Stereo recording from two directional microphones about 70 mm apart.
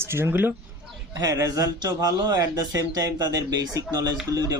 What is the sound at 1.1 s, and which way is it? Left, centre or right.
A man's voice, right.